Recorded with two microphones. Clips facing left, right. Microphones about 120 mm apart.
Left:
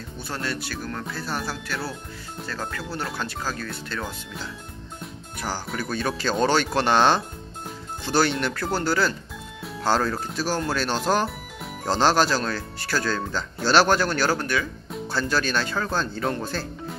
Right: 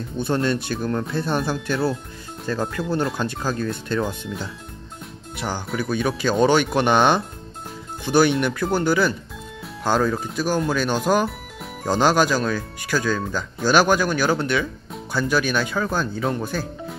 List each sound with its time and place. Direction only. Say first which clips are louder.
0.2 s speech: right 9 dB; 25° right (ahead or behind)
4.0 s speech: right 7 dB; 5° right (ahead or behind)
5.9 s speech: right 4 dB; 15° right (ahead or behind)
10.1 s speech: right 3 dB; centre (ahead or behind)
10.7 s speech: right 2 dB; 10° right (ahead or behind)
11.2 s music: right 2 dB; centre (ahead or behind)
11.9 s speech: right 2 dB; 10° right (ahead or behind)